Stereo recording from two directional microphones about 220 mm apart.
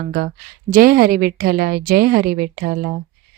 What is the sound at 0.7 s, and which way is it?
A woman's voice, 40° right (ahead or behind).